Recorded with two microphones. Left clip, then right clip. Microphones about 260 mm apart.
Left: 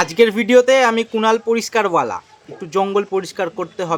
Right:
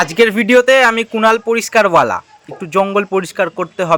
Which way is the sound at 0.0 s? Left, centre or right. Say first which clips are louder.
Right 2 dB; centre.